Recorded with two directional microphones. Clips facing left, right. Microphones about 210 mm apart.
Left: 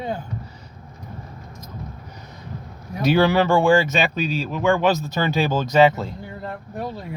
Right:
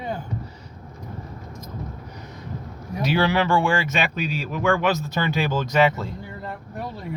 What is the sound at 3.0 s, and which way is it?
Speech, 50° left (ahead or behind).